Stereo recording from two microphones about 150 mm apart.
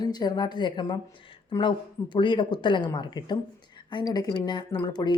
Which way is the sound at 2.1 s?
30° left (ahead or behind).